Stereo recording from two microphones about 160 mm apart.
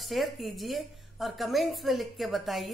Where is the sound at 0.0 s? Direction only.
Centre (ahead or behind).